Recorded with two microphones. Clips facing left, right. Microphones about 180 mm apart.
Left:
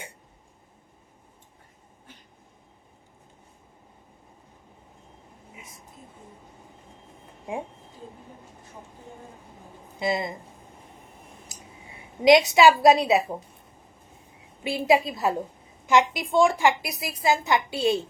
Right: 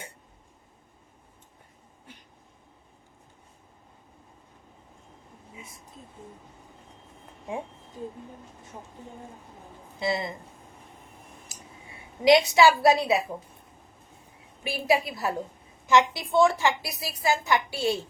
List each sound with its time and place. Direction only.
10.0 s speech: 20° left (ahead or behind)
12.2 s a woman's voice: 20° left (ahead or behind)
14.6 s a woman's voice: 20° left (ahead or behind)